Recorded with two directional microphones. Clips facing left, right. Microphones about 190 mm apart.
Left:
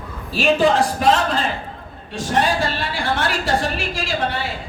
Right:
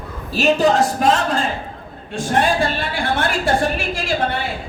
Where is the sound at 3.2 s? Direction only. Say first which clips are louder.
Right 4 dB; 55° right (ahead or behind).